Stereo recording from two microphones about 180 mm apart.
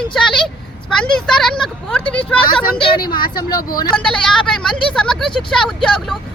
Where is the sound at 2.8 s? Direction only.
25° left (ahead or behind).